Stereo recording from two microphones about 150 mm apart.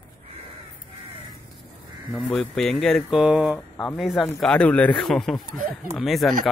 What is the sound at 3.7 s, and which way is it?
Speech, 5° left (ahead or behind).